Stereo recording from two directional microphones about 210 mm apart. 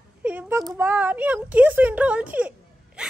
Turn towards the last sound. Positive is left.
turn(degrees=-5)  # may be behind; listen again after turning